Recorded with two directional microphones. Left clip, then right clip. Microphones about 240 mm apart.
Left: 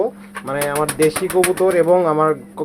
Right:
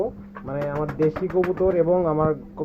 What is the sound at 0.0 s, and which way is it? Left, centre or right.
Speech, left.